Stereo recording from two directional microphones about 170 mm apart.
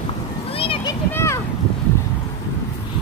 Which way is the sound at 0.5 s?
30° left (ahead or behind).